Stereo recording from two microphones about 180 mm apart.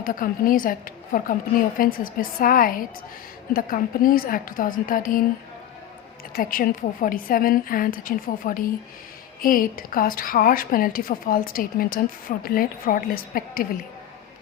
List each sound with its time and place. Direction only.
0.0 s a woman's voice: 50° left (ahead or behind)
6.3 s a woman's voice: 50° left (ahead or behind)